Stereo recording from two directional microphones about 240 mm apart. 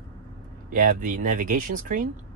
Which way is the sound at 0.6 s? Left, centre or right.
Right.